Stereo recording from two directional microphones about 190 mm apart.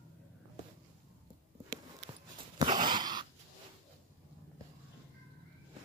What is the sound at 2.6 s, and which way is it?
Dog, 25° right (ahead or behind).